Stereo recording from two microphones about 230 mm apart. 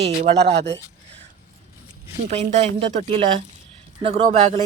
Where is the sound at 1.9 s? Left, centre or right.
Right.